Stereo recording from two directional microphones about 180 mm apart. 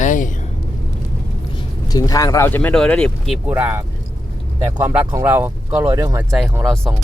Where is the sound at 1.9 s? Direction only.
20° left (ahead or behind); by 3.6 s centre (ahead or behind).